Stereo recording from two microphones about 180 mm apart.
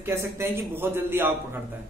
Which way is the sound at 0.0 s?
15° right (ahead or behind).